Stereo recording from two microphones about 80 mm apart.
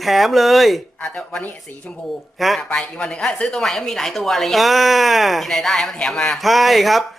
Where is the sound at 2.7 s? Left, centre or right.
Centre.